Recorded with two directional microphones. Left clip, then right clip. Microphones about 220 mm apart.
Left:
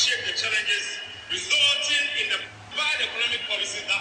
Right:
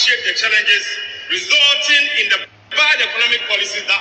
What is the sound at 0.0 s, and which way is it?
A man's voice, 25° right (ahead or behind).